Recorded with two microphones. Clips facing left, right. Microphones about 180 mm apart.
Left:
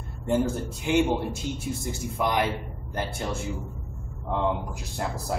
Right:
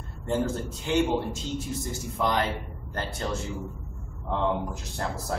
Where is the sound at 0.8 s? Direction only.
10° left (ahead or behind).